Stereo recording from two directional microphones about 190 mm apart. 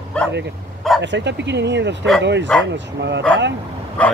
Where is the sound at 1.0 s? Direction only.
65° right (ahead or behind).